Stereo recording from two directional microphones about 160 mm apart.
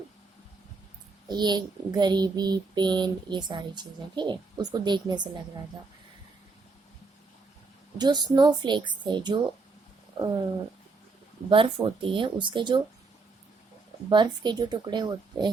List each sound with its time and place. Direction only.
1.3 s child singing: 25° right (ahead or behind)
7.9 s child singing: 25° right (ahead or behind)
11.4 s speech: 35° right (ahead or behind)
14.1 s child singing: 30° right (ahead or behind)